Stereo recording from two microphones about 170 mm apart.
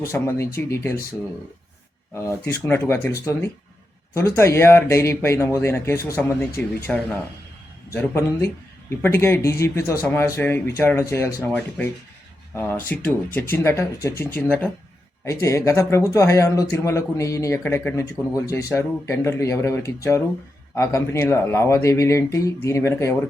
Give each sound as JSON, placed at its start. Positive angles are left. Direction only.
{"t": 0.0, "sound": "speech", "side_deg": 15}
{"t": 2.1, "sound": "speech", "side_deg": 10}
{"t": 12.5, "sound": "speech", "side_deg": 10}